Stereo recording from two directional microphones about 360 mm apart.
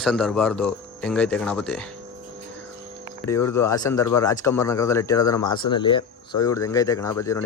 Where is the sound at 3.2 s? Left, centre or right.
Centre.